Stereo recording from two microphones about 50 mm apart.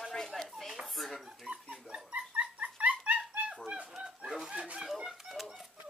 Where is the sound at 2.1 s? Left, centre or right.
Right.